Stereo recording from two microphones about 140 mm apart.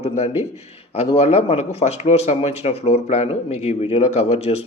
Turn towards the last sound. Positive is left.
turn(degrees=50)  # may be behind; listen again after turning